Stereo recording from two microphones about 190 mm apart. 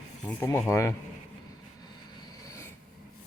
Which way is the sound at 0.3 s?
10° left (ahead or behind).